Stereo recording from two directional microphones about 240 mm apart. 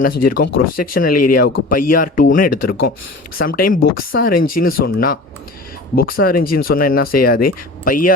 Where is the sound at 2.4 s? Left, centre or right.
Left.